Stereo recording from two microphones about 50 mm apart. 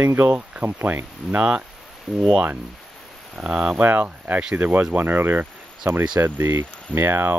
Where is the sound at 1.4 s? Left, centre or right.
Right.